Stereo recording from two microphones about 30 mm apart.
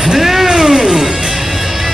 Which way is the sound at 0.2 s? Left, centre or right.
Centre.